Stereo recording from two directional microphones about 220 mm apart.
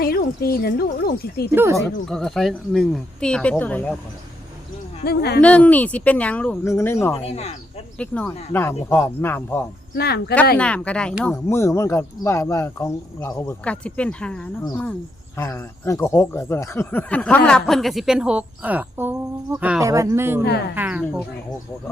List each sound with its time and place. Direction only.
0.0 s speech: 40° left (ahead or behind)
1.5 s speech: 10° right (ahead or behind)
2.0 s speech: centre (ahead or behind)
5.0 s speech: 45° left (ahead or behind)
5.4 s speech: 5° left (ahead or behind)
7.2 s speech: 25° left (ahead or behind)
7.9 s speech: 5° left (ahead or behind)
9.9 s speech: 45° left (ahead or behind)
10.6 s speech: 5° left (ahead or behind)